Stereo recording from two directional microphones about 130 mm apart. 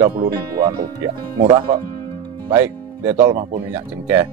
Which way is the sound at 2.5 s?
20° right (ahead or behind).